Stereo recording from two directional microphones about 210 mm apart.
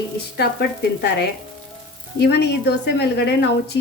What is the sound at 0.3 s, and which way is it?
Speech, 50° left (ahead or behind).